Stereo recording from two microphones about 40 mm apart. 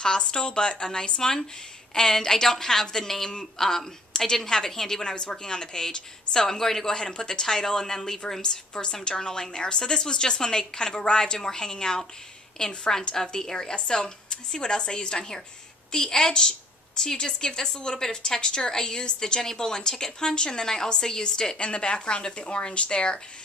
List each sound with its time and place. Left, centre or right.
0.0 s a woman's voice: centre